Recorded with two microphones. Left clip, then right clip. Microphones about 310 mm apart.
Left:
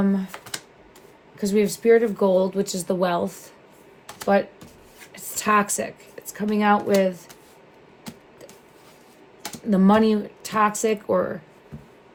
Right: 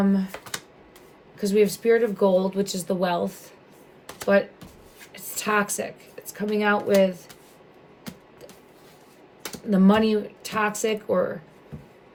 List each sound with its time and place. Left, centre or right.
0.0 s speech: centre
1.4 s speech: centre
5.1 s speech: centre
9.6 s speech: centre